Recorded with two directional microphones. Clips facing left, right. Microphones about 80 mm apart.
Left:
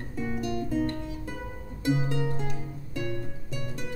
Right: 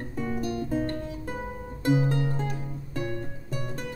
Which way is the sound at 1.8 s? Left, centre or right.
Right.